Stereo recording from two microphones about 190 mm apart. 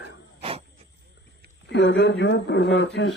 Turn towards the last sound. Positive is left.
turn(degrees=65)  # may be behind; listen again after turning